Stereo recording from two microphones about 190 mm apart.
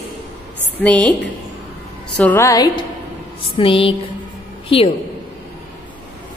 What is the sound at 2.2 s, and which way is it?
Speech, 10° left (ahead or behind).